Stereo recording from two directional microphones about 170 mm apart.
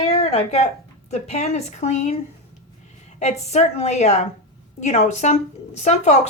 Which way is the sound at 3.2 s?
40° left (ahead or behind).